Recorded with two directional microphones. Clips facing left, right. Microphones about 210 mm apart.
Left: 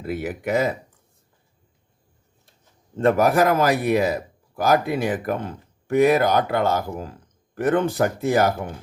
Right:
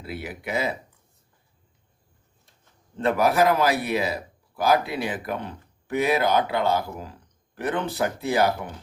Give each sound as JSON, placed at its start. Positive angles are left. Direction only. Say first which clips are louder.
{"t": 0.0, "sound": "a man's voice", "louder": "left 7 dB", "side_deg": 45}
{"t": 3.0, "sound": "a man's voice", "louder": "left 3 dB", "side_deg": 45}